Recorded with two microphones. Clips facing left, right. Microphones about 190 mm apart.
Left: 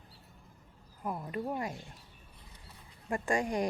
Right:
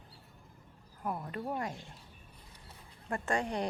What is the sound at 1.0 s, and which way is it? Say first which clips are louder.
Speech: left 1 dB; 5° left (ahead or behind).